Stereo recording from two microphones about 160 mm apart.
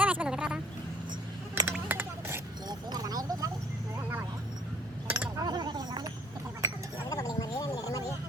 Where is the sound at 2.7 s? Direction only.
25° right (ahead or behind).